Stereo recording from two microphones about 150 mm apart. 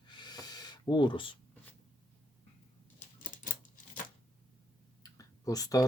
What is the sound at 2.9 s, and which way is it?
Typewriter, 60° left (ahead or behind).